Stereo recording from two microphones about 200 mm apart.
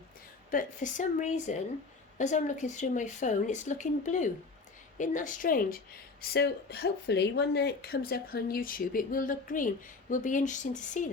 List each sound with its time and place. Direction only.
0.5 s a woman's voice: 40° left (ahead or behind)